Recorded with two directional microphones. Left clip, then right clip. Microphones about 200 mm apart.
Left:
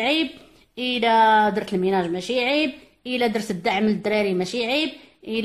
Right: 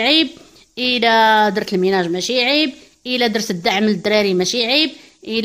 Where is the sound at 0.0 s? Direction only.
40° right (ahead or behind).